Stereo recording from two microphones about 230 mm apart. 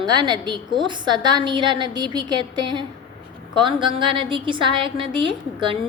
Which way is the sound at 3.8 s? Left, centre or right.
Right.